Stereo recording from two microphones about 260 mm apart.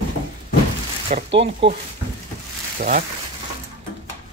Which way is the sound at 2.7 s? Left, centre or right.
Right.